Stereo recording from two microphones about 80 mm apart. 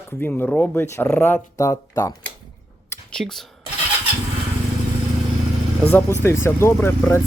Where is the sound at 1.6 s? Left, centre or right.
Left.